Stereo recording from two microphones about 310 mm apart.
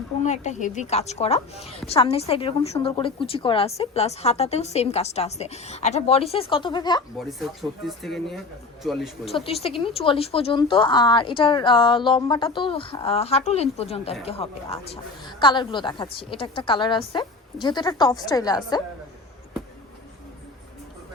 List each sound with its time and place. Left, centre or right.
0.2 s a woman's voice: left
7.2 s speech: centre
9.5 s speech: centre